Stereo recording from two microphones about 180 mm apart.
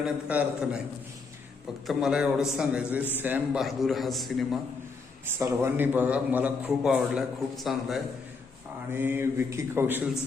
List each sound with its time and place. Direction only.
0.0 s a man's voice: 5° right (ahead or behind)
1.9 s a man's voice: 5° right (ahead or behind)
5.2 s a man's voice: 15° right (ahead or behind)
8.9 s a man's voice: 10° right (ahead or behind)